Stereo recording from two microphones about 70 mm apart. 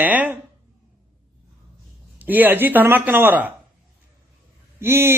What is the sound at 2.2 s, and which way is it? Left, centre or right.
Speech, right.